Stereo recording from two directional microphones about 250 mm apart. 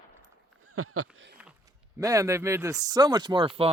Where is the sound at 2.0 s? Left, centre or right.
Centre.